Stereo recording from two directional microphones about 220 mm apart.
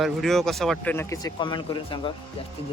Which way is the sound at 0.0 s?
Centre (ahead or behind).